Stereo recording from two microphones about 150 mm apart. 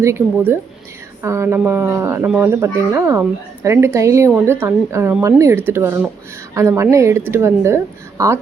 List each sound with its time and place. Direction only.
0.0 s a woman's voice: 15° right (ahead or behind)